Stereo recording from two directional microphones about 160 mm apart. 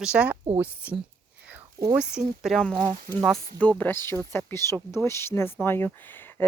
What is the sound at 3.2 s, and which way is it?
Speech, centre (ahead or behind).